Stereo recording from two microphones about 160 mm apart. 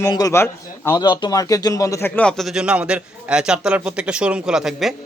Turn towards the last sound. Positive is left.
turn(degrees=0)  # may be behind; listen again after turning